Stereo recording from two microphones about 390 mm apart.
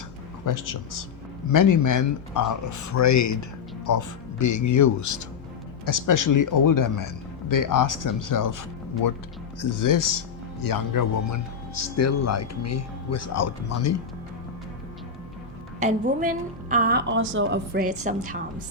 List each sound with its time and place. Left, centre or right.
0.4 s a man's voice: left
15.8 s a woman's voice: centre